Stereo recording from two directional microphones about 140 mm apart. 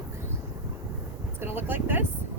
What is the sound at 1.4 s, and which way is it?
Speech, 15° right (ahead or behind).